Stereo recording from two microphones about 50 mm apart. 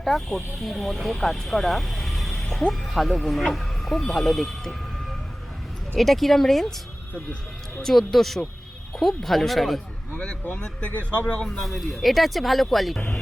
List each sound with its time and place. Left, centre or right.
0.0 s speech: centre
6.0 s speech: centre
7.8 s speech: centre
10.4 s speech: left
11.4 s speech: centre